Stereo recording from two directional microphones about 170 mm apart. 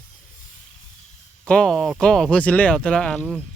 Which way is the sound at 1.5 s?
5° left (ahead or behind).